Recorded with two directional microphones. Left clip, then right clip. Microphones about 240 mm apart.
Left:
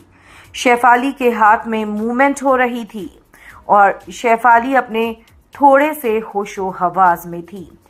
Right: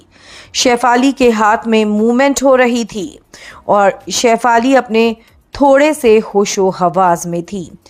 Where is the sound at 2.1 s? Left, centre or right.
Right.